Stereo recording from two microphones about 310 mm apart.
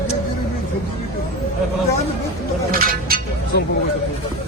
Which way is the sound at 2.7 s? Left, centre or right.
Right.